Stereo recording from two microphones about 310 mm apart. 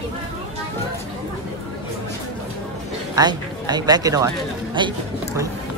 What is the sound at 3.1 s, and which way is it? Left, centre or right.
Speech, centre.